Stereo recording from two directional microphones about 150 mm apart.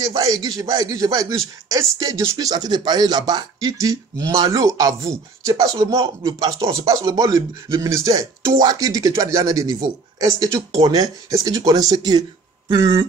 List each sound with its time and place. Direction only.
0.0 s speech: 25° right (ahead or behind)